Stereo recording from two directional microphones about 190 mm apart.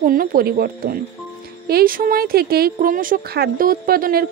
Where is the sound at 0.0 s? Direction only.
45° right (ahead or behind).